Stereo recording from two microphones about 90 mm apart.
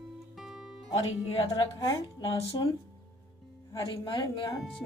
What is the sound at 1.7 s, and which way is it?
Speech, 50° left (ahead or behind).